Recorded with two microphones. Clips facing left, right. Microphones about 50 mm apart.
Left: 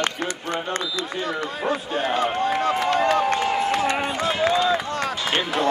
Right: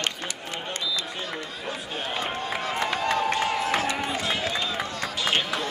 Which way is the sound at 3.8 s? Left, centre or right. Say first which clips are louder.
Left 4 dB; left.